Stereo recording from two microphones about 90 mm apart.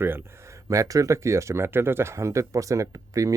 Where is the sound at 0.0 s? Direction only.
25° right (ahead or behind).